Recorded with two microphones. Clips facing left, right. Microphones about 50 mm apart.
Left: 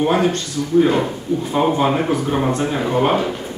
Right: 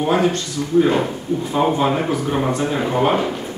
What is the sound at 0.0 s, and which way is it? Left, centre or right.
Speech, centre.